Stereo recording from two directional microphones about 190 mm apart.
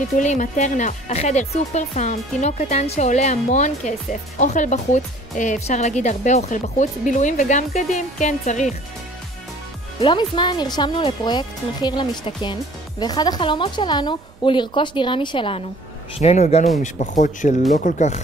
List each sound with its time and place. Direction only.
0.2 s speech: 40° left (ahead or behind)
9.9 s speech: 25° left (ahead or behind)